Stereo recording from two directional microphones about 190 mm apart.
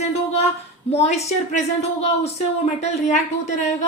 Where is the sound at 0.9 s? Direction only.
35° left (ahead or behind).